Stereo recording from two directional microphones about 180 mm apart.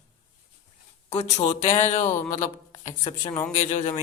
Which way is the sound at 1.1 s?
35° left (ahead or behind).